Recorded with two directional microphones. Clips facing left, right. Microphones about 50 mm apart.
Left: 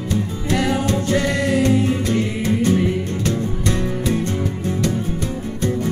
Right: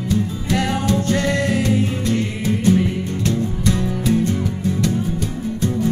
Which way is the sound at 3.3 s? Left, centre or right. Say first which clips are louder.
Right 2 dB; left.